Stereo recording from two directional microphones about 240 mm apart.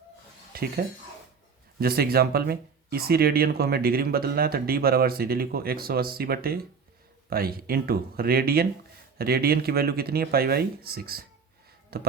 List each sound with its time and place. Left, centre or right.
0.5 s speech: right